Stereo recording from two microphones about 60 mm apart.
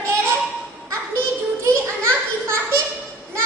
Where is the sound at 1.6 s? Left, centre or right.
Right.